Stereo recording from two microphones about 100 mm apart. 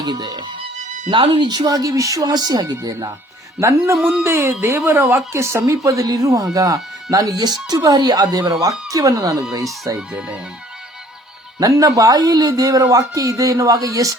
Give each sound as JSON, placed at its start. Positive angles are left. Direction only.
{"t": 0.0, "sound": "speech", "side_deg": -45}
{"t": 1.1, "sound": "speech", "side_deg": -60}
{"t": 3.6, "sound": "speech", "side_deg": -30}
{"t": 10.1, "sound": "speech", "side_deg": -10}
{"t": 11.6, "sound": "speech", "side_deg": -35}